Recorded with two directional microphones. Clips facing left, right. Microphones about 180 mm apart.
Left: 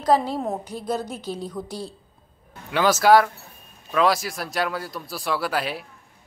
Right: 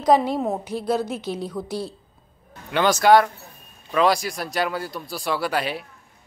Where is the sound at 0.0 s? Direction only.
15° right (ahead or behind).